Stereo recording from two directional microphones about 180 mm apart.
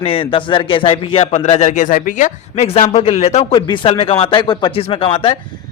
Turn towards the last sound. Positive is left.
turn(degrees=30)  # may be behind; listen again after turning